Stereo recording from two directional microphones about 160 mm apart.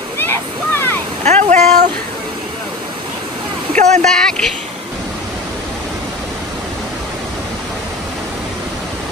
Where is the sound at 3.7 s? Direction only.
45° right (ahead or behind).